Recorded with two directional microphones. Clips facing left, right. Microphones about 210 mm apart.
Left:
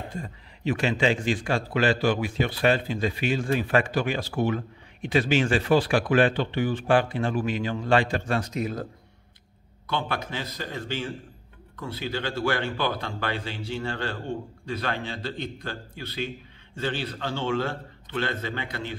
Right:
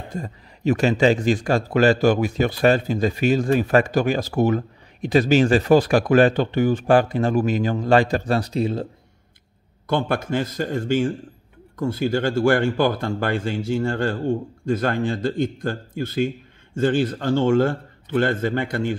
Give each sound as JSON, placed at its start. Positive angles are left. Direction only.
{"t": 0.1, "sound": "a man's voice", "side_deg": -40}
{"t": 9.8, "sound": "a man's voice", "side_deg": -50}